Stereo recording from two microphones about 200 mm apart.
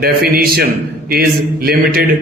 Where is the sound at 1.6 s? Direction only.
50° right (ahead or behind).